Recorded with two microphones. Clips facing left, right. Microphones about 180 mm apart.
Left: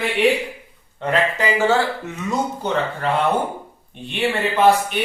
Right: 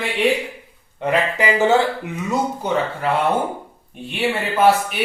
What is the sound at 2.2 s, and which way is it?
A man's voice, 10° right (ahead or behind).